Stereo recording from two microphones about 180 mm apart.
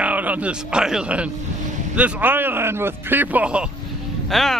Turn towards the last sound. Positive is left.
turn(degrees=0)  # may be behind; listen again after turning